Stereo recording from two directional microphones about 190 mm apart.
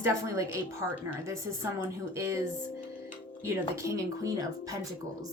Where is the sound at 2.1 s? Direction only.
15° right (ahead or behind).